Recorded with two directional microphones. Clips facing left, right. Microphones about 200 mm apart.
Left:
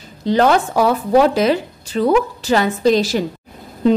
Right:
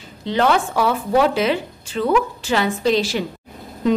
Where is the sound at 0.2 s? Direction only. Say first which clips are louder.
Left 4 dB; 40° left (ahead or behind).